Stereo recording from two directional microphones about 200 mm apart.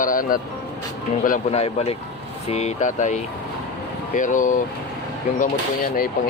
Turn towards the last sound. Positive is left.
turn(degrees=40)  # may be behind; listen again after turning